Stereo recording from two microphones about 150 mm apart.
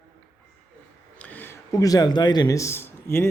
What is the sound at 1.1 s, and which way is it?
Speech, 10° left (ahead or behind).